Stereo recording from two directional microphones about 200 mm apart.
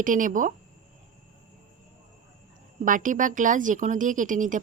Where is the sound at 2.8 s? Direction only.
40° right (ahead or behind).